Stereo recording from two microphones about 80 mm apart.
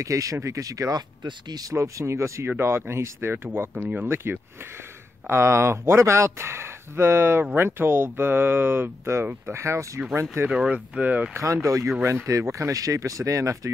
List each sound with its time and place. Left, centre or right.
0.0 s speech: right
9.9 s speech: right
10.5 s speech: centre
11.3 s speech: right